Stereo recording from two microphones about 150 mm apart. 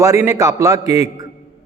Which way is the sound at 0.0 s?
20° right (ahead or behind).